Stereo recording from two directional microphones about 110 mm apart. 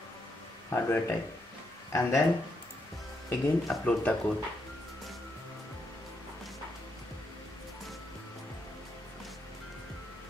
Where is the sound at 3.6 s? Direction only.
10° left (ahead or behind).